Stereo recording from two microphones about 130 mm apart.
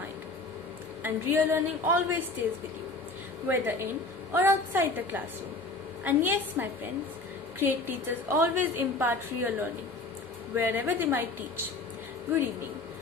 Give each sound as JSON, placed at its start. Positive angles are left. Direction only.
{"t": 1.0, "sound": "a woman's voice", "side_deg": -15}
{"t": 3.4, "sound": "a woman's voice", "side_deg": -15}